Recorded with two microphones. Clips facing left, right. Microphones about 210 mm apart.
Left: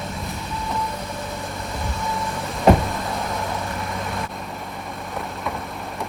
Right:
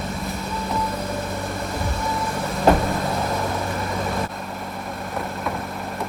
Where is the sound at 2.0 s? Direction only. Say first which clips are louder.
Even; centre (ahead or behind).